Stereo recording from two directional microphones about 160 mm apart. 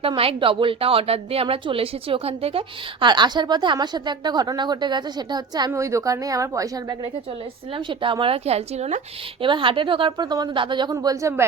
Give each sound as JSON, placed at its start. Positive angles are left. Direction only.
{"t": 0.0, "sound": "a woman's voice", "side_deg": -35}
{"t": 9.4, "sound": "a woman's voice", "side_deg": -30}